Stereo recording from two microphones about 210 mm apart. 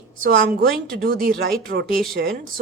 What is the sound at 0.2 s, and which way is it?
A woman's voice, 40° right (ahead or behind).